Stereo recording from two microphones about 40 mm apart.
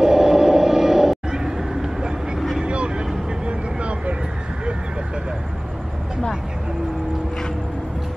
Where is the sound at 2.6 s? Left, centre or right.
Right.